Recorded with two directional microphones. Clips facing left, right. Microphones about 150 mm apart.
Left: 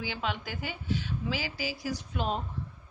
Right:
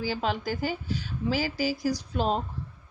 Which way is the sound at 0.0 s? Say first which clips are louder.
Right 5 dB; 40° right (ahead or behind).